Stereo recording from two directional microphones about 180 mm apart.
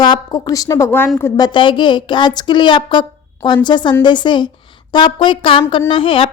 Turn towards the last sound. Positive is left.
turn(degrees=30)  # may be behind; listen again after turning